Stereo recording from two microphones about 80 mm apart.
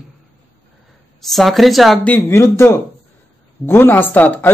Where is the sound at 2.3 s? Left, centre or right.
Left.